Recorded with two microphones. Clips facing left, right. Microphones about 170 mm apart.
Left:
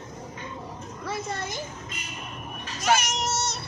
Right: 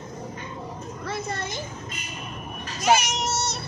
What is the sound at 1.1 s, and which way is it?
Speech, 10° left (ahead or behind).